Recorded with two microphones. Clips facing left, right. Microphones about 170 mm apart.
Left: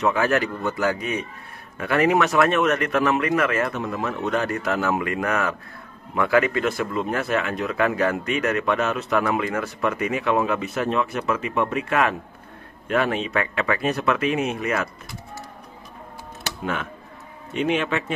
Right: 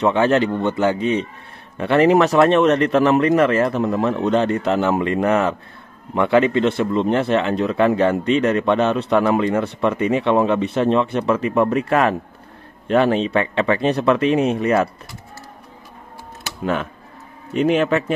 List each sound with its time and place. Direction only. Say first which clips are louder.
0.0 s speech: right 5 dB; 30° right (ahead or behind)
17.6 s speech: right 6 dB; 40° right (ahead or behind)